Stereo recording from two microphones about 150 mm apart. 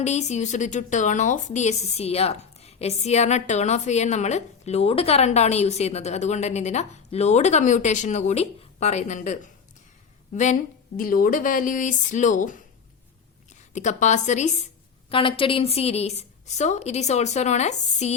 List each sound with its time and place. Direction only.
0.0 s a woman's voice: 50° left (ahead or behind)
13.7 s a woman's voice: 50° left (ahead or behind)
15.1 s a woman's voice: 35° left (ahead or behind)